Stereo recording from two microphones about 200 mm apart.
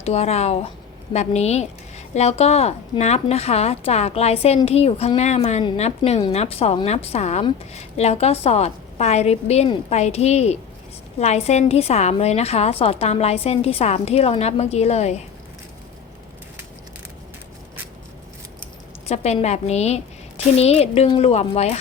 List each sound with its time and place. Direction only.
0.0 s a woman's voice: 30° left (ahead or behind)
19.0 s a woman's voice: 30° left (ahead or behind)